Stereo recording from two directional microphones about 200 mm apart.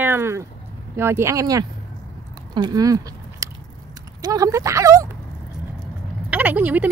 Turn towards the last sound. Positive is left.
turn(degrees=-10)  # may be behind; listen again after turning